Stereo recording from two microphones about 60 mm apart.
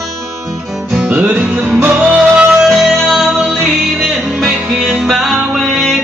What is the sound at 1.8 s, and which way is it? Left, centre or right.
Music, right.